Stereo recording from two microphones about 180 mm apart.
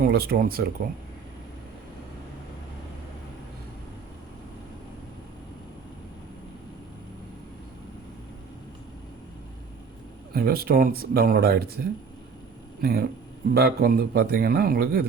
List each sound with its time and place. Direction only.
0.0 s speech: 60° right (ahead or behind)
10.3 s speech: 55° right (ahead or behind)
12.8 s speech: 60° right (ahead or behind)